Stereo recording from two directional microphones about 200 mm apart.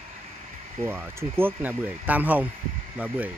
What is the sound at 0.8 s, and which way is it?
Speech, 10° right (ahead or behind).